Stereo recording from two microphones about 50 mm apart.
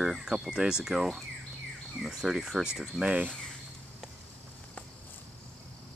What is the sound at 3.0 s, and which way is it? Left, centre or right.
Speech, right.